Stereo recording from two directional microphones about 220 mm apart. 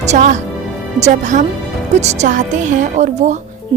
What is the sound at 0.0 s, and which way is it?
Speech, 30° right (ahead or behind).